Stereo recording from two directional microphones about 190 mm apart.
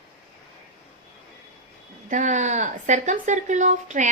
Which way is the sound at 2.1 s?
40° right (ahead or behind).